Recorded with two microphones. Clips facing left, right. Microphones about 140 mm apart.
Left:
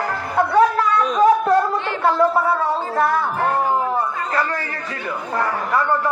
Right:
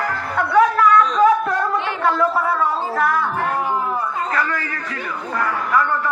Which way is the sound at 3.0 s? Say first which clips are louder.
Left 1 dB; 30° left (ahead or behind).